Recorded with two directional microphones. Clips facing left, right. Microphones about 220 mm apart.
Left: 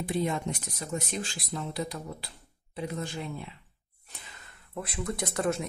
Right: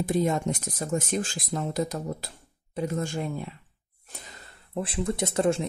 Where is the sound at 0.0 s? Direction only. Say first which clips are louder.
Right 5 dB; 45° right (ahead or behind).